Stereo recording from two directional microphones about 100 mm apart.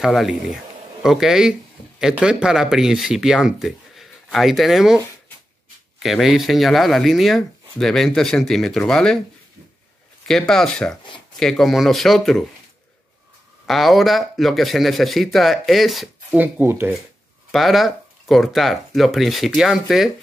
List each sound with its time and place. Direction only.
0.0 s speech: centre (ahead or behind)
10.2 s speech: 5° left (ahead or behind)
13.7 s speech: centre (ahead or behind)
16.3 s speech: 20° right (ahead or behind)
17.5 s speech: centre (ahead or behind)